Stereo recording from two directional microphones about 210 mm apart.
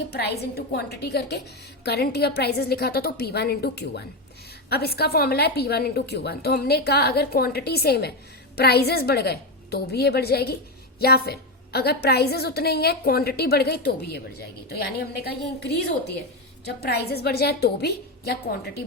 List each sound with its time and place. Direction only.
0.1 s a woman's voice: 50° left (ahead or behind)